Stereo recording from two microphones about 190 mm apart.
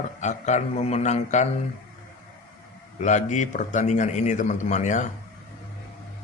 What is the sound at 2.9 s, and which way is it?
Speech, 40° left (ahead or behind).